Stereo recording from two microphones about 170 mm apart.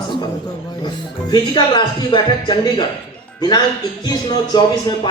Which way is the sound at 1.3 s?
25° left (ahead or behind).